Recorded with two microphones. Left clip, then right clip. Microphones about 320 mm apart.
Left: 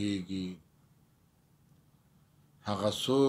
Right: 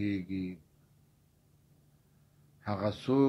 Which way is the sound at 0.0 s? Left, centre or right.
Left.